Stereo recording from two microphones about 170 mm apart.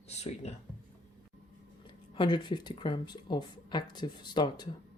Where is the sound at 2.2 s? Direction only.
25° left (ahead or behind).